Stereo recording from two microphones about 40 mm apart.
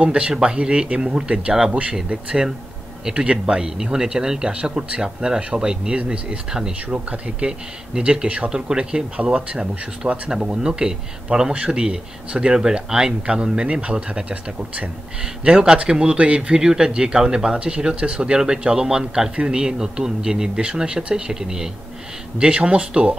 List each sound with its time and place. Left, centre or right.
0.0 s speech: right
3.2 s speech: right
5.9 s speech: right
7.4 s speech: right
15.8 s speech: right
16.3 s speech: centre
22.4 s speech: right